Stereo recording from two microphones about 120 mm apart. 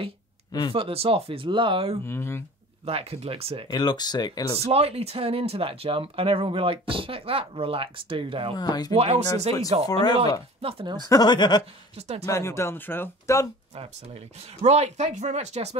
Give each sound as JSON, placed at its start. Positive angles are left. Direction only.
{"t": 0.5, "sound": "speech", "side_deg": 40}
{"t": 0.7, "sound": "speech", "side_deg": -50}
{"t": 2.0, "sound": "speech", "side_deg": 20}
{"t": 2.8, "sound": "speech", "side_deg": -55}
{"t": 3.7, "sound": "speech", "side_deg": 35}
{"t": 4.6, "sound": "speech", "side_deg": -55}
{"t": 8.5, "sound": "speech", "side_deg": 35}
{"t": 8.9, "sound": "speech", "side_deg": -55}
{"t": 10.6, "sound": "speech", "side_deg": -50}
{"t": 11.0, "sound": "speech", "side_deg": 35}
{"t": 12.3, "sound": "speech", "side_deg": 25}
{"t": 14.6, "sound": "speech", "side_deg": -65}